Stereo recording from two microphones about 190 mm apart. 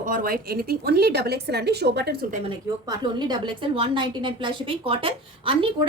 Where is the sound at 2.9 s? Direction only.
25° right (ahead or behind).